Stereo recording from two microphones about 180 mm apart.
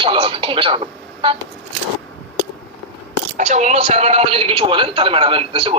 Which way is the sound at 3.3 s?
40° right (ahead or behind).